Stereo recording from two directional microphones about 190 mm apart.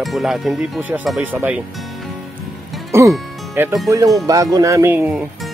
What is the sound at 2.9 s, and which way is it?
Speech, 15° right (ahead or behind).